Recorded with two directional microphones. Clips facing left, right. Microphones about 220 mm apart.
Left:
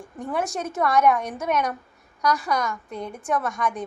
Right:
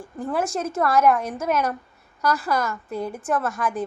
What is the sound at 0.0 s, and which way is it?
Speech, centre (ahead or behind).